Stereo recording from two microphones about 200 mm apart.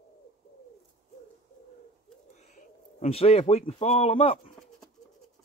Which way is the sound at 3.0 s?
30° left (ahead or behind).